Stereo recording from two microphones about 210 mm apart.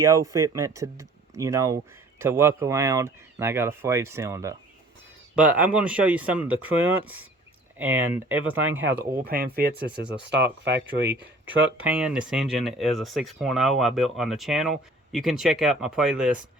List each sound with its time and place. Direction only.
0.0 s speech: 15° right (ahead or behind)
7.8 s speech: 10° right (ahead or behind)
9.1 s speech: 45° right (ahead or behind)
10.0 s speech: 55° right (ahead or behind)
11.8 s speech: 5° right (ahead or behind)